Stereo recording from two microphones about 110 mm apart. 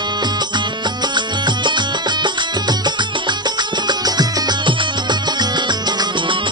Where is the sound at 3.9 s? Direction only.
40° right (ahead or behind).